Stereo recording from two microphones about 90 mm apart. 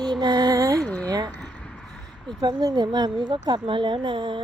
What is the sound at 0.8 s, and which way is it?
Speech, 10° left (ahead or behind).